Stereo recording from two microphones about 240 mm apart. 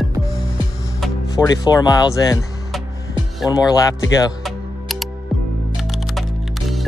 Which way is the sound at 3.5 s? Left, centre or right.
Centre.